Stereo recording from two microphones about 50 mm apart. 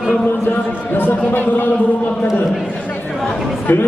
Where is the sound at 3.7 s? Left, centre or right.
Left.